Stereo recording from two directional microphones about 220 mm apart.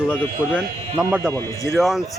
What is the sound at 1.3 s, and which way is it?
Speech, 10° left (ahead or behind).